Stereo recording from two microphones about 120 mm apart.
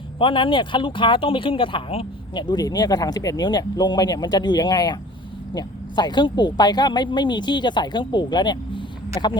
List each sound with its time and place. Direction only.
0.2 s speech: 45° left (ahead or behind)
2.3 s speech: 40° left (ahead or behind)